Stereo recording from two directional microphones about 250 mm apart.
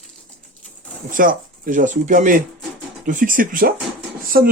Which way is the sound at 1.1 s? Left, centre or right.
Right.